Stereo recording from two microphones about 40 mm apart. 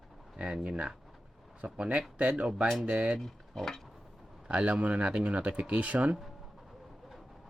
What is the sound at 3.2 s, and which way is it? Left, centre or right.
Speech, centre.